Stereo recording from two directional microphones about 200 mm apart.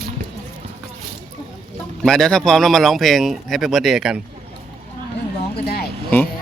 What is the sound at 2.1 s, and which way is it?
Speech, centre (ahead or behind).